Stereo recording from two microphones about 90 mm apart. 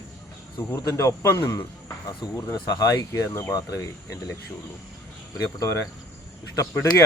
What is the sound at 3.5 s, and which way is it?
Speech, 40° left (ahead or behind).